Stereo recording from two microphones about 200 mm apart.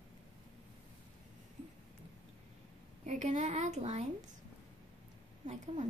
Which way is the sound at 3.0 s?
35° right (ahead or behind).